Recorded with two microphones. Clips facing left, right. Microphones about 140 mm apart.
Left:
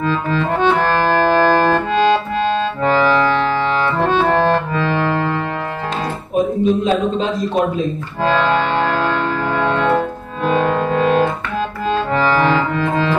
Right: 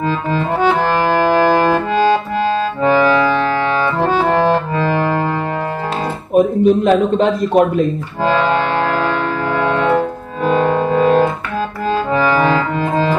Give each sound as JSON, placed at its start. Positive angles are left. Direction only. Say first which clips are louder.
{"t": 0.0, "sound": "music", "louder": "even", "side_deg": -15}
{"t": 6.3, "sound": "a man's voice", "louder": "right 4 dB", "side_deg": -55}
{"t": 8.2, "sound": "music", "louder": "right 1 dB", "side_deg": -15}